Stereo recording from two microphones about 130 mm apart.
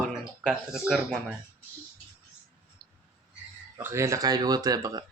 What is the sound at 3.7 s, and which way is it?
Speech, 20° right (ahead or behind).